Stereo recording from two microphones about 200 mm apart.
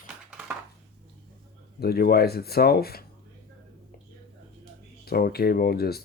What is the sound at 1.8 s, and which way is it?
Speech, 50° left (ahead or behind).